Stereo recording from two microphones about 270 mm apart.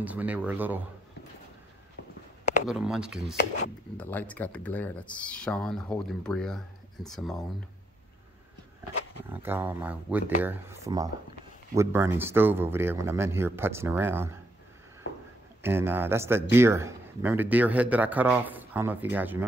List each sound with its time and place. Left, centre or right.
0.0 s speech: centre
2.0 s a sound: left
2.6 s speech: centre
9.3 s a man's voice: centre
15.6 s a man's voice: centre